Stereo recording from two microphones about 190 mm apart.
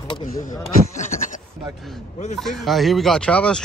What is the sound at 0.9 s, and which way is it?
Goat, 40° left (ahead or behind).